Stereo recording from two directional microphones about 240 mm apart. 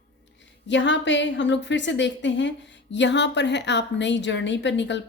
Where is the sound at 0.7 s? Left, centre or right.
Left.